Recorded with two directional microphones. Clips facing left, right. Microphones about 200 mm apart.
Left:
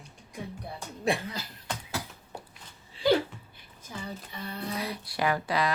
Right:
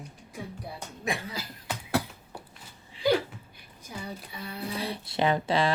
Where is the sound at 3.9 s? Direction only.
10° right (ahead or behind).